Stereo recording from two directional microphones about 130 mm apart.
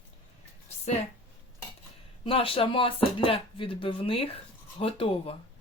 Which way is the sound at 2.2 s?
45° left (ahead or behind).